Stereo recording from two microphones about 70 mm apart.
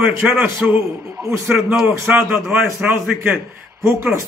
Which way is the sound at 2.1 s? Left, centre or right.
Centre.